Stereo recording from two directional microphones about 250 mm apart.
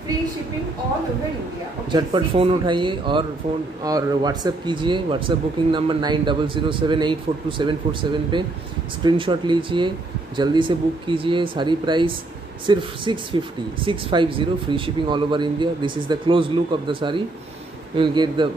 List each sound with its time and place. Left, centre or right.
1.9 s speech: centre